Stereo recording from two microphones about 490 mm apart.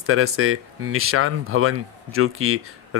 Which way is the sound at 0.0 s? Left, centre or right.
Right.